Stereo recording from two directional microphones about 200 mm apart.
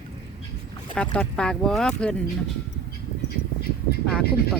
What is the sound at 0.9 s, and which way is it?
Speech, 5° left (ahead or behind).